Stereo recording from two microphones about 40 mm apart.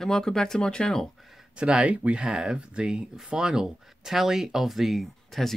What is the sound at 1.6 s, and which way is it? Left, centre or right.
Speech, right.